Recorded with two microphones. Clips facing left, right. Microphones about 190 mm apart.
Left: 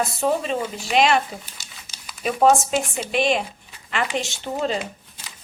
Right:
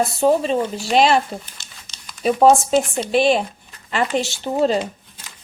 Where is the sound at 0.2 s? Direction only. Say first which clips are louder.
Right 6 dB; 30° right (ahead or behind).